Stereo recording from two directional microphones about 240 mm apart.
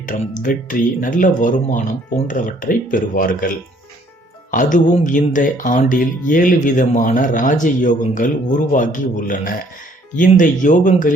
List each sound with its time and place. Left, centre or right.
0.0 s speech: left
4.5 s speech: left